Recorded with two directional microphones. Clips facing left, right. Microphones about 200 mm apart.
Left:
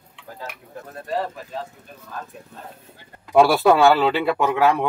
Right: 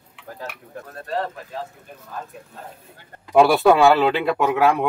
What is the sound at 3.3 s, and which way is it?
Speech, centre (ahead or behind).